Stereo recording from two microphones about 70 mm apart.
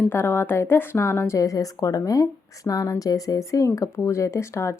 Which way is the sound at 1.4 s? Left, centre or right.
Left.